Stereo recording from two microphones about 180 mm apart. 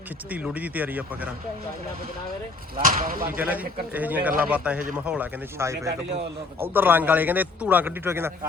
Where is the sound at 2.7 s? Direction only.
50° right (ahead or behind).